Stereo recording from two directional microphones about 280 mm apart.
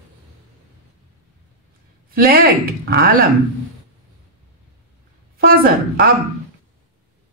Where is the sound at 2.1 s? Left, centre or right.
Right.